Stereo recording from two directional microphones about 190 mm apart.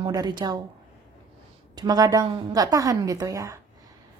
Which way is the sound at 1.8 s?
20° right (ahead or behind).